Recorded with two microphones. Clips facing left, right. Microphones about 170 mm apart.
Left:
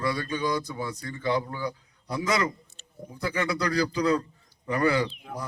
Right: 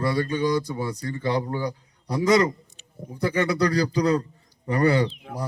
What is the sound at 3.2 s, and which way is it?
A man's voice, 30° right (ahead or behind).